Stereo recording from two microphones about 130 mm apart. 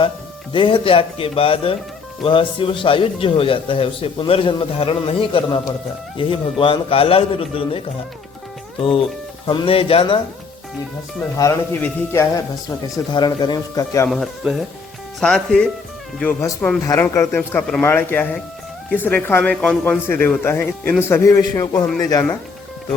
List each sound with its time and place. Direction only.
0.5 s speech: 40° left (ahead or behind)
11.3 s a man's voice: 25° left (ahead or behind)
13.1 s a man's voice: 35° left (ahead or behind)
14.1 s a man's voice: 5° right (ahead or behind); by 21.8 s 25° left (ahead or behind)